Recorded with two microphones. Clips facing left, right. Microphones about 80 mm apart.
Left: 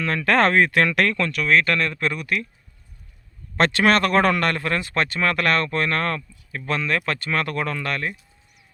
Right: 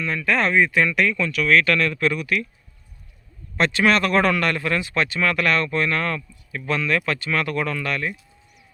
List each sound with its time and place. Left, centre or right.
0.3 s speech: left
1.3 s speech: left
3.6 s speech: left